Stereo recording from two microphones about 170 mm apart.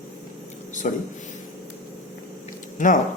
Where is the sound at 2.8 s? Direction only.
50° left (ahead or behind).